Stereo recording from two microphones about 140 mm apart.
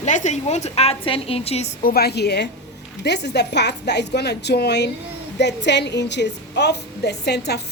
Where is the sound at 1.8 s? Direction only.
90° left.